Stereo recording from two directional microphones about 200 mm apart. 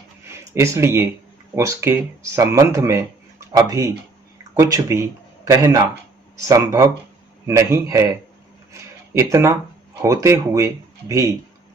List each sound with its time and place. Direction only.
0.3 s speech: 15° right (ahead or behind)